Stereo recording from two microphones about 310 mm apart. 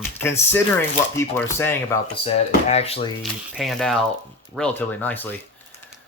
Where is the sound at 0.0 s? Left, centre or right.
Centre.